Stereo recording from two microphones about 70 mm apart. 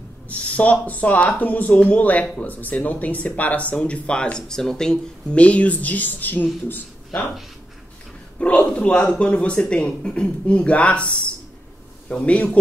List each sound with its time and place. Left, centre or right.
0.3 s speech: left
5.4 s speech: centre
8.4 s speech: centre